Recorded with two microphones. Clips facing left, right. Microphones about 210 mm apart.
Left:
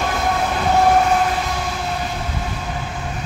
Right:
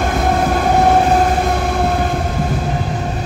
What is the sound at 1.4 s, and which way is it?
Train, 55° right (ahead or behind).